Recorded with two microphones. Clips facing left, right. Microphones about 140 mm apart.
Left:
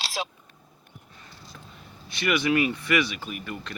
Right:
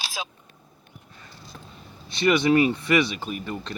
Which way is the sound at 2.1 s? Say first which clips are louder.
Right 5 dB; 25° right (ahead or behind).